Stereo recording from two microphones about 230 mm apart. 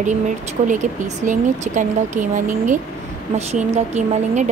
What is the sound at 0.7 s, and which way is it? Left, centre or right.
A woman's voice, right.